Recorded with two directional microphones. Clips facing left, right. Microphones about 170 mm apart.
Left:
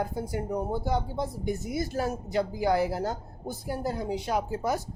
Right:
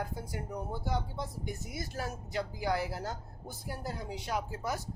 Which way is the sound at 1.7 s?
25° left (ahead or behind).